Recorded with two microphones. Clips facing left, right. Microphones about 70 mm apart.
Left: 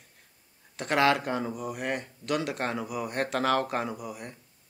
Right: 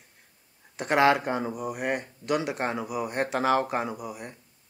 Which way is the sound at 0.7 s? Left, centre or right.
Right.